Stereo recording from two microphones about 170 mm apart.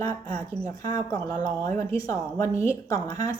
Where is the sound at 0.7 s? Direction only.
20° left (ahead or behind).